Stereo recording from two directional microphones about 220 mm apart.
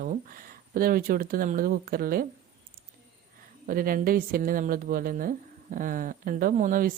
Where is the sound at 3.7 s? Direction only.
40° right (ahead or behind).